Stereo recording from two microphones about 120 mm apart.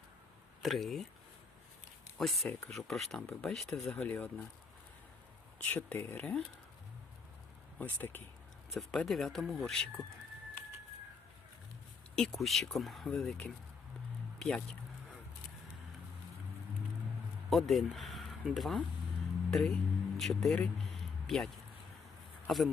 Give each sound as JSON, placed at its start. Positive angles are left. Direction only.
{"t": 0.6, "sound": "speech", "side_deg": 0}
{"t": 2.1, "sound": "speech", "side_deg": 0}
{"t": 5.5, "sound": "speech", "side_deg": 15}
{"t": 7.8, "sound": "speech", "side_deg": 15}
{"t": 8.7, "sound": "speech", "side_deg": 0}
{"t": 12.1, "sound": "speech", "side_deg": 5}
{"t": 17.7, "sound": "speech", "side_deg": 0}